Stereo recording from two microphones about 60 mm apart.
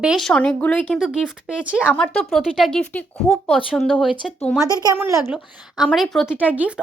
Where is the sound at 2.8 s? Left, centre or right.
Left.